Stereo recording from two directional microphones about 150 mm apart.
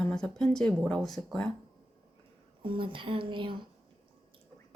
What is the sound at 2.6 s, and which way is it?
Speech, 35° right (ahead or behind).